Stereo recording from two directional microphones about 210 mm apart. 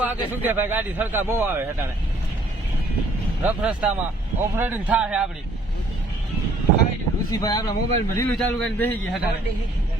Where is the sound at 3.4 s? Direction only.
5° right (ahead or behind).